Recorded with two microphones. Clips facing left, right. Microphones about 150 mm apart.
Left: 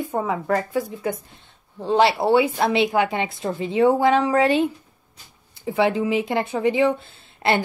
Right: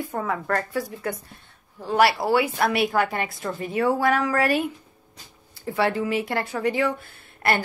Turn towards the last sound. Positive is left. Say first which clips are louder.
# left 3 dB
turn(degrees=20)  # may be behind; listen again after turning